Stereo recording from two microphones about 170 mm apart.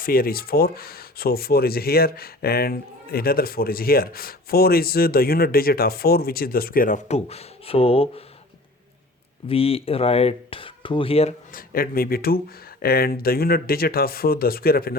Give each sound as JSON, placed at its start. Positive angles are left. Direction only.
{"t": 0.0, "sound": "speech", "side_deg": 60}
{"t": 9.5, "sound": "speech", "side_deg": 35}
{"t": 11.5, "sound": "speech", "side_deg": 60}